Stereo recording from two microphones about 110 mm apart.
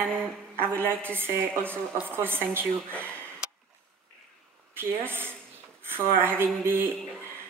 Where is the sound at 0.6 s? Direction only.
20° right (ahead or behind).